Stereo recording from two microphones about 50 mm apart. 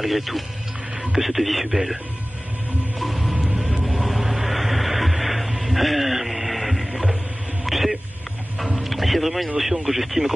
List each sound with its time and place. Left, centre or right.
0.0 s speech: centre
3.0 s music: centre
3.4 s music: right
4.0 s a sound: centre
8.8 s boat: centre
9.6 s speech: centre